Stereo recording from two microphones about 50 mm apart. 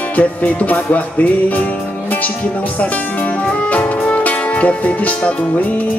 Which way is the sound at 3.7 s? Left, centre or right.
Left.